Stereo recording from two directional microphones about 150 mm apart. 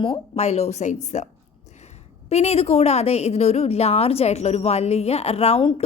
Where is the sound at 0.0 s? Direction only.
40° left (ahead or behind).